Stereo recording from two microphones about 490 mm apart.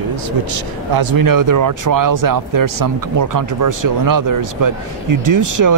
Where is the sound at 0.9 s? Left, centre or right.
Right.